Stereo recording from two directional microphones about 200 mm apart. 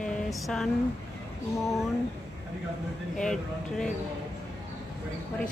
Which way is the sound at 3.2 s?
5° left (ahead or behind).